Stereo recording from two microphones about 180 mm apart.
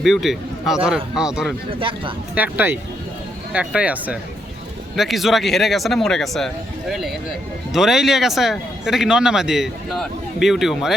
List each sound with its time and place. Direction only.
0.0 s a man's voice: centre (ahead or behind)
1.8 s speech: 30° right (ahead or behind)
2.3 s speech: 10° right (ahead or behind)